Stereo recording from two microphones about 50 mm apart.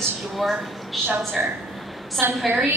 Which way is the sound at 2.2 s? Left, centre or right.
Right.